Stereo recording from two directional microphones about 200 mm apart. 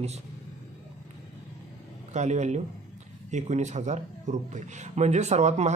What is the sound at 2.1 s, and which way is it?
Speech, 35° right (ahead or behind).